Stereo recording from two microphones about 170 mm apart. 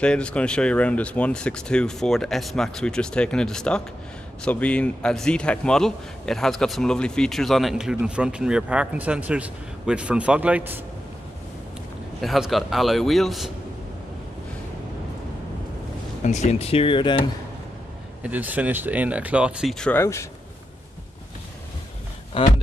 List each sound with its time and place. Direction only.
0.0 s a man's voice: 5° left (ahead or behind)
12.2 s a man's voice: centre (ahead or behind)
16.3 s speech: 40° left (ahead or behind)
18.2 s speech: 10° right (ahead or behind)
20.0 s speech: 15° left (ahead or behind)